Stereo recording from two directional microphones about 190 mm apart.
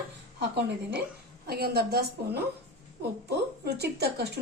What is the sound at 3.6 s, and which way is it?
Speech, 60° right (ahead or behind).